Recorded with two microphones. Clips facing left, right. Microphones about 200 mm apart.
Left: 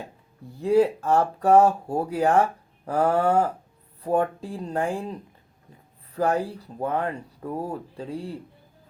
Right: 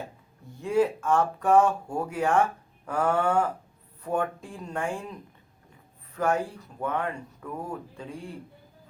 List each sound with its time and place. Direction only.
0.6 s speech: 35° left (ahead or behind)